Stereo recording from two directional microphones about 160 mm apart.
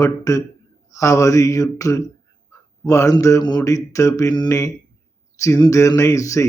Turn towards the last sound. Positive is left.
turn(degrees=20)  # may be behind; listen again after turning